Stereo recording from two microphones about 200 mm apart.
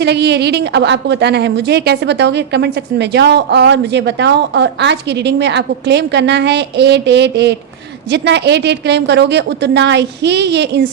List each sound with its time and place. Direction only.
0.0 s a woman's voice: 55° right (ahead or behind)